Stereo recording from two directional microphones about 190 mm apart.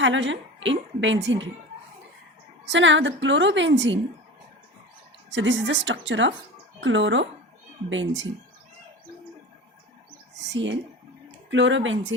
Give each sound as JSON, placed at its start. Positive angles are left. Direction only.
{"t": 0.0, "sound": "a woman's voice", "side_deg": -75}
{"t": 2.6, "sound": "a woman's voice", "side_deg": -75}
{"t": 5.3, "sound": "a woman's voice", "side_deg": -75}
{"t": 10.3, "sound": "speech", "side_deg": -70}